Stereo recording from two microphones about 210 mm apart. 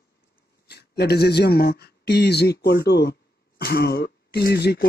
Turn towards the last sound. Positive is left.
turn(degrees=50)  # may be behind; listen again after turning